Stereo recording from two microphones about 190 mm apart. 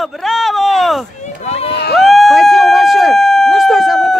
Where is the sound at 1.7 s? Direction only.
60° left (ahead or behind).